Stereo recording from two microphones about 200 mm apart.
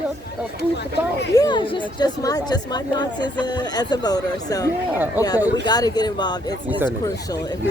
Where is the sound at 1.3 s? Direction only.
20° left (ahead or behind).